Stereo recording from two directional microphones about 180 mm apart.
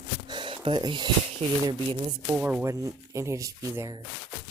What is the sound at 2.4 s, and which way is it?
Speech, 10° right (ahead or behind).